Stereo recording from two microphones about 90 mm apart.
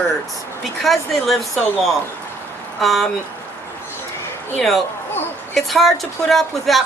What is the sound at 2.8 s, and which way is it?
Speech, centre (ahead or behind).